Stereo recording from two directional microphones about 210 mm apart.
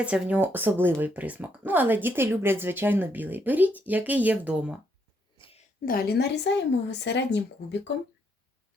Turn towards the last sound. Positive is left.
turn(degrees=55)  # may be behind; listen again after turning